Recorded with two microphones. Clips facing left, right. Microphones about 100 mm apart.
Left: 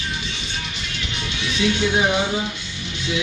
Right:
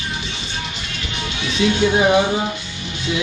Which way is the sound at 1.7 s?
40° right (ahead or behind).